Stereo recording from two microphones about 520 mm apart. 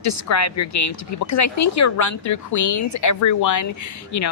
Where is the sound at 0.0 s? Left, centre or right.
Left.